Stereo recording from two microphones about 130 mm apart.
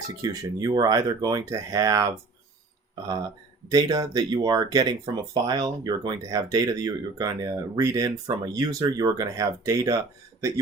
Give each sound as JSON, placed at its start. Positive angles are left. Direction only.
{"t": 0.2, "sound": "speech", "side_deg": -30}
{"t": 3.7, "sound": "speech", "side_deg": -30}